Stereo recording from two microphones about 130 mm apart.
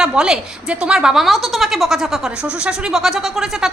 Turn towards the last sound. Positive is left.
turn(degrees=0)  # may be behind; listen again after turning